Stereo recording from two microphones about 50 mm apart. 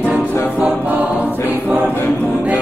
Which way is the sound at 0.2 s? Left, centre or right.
Left.